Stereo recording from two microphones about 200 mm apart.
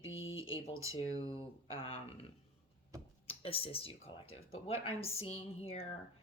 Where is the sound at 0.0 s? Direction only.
75° left (ahead or behind).